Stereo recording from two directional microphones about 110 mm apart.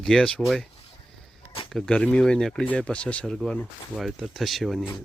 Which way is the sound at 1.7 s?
10° left (ahead or behind).